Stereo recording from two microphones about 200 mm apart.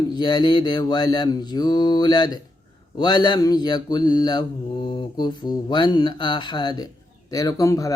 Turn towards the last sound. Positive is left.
turn(degrees=15)  # may be behind; listen again after turning